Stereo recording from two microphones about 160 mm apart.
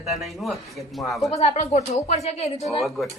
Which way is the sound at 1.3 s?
40° left (ahead or behind).